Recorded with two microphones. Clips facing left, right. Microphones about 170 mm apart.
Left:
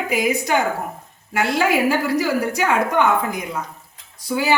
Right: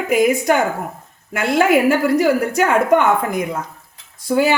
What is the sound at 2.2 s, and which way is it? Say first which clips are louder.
Speech: right 5 dB; 50° right (ahead or behind).